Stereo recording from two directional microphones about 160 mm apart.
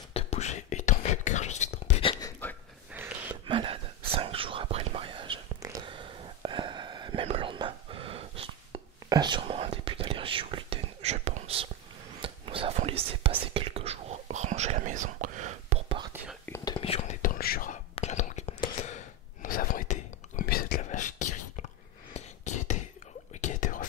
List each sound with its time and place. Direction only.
0.1 s whispering: 45° left (ahead or behind)
2.4 s a sound: 10° left (ahead or behind)
2.9 s gasp: 10° right (ahead or behind)
3.4 s a sound: 35° right (ahead or behind)
4.1 s whispering: 35° right (ahead or behind)
5.9 s a sound: 30° right (ahead or behind)
7.2 s whispering: 35° right (ahead or behind); by 15.8 s 50° right (ahead or behind)
16.6 s whispering: 35° left (ahead or behind)
17.2 s whispering: 65° left (ahead or behind)
17.9 s whispering: 45° left (ahead or behind); by 20.8 s 75° left (ahead or behind)
20.9 s a sound: 50° left (ahead or behind)
23.4 s whispering: 55° left (ahead or behind)